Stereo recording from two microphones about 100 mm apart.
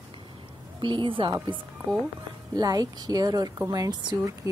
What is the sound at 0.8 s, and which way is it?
Speech, 55° right (ahead or behind).